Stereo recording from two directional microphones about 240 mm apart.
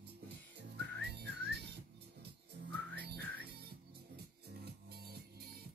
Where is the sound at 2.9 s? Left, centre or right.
Right.